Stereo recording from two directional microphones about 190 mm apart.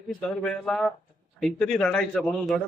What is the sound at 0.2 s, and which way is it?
A man's voice, centre (ahead or behind).